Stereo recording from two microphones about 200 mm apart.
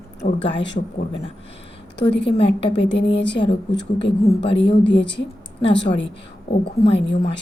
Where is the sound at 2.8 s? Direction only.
60° left (ahead or behind).